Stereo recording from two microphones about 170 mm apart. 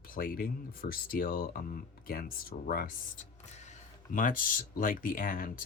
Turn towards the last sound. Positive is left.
turn(degrees=55)  # may be behind; listen again after turning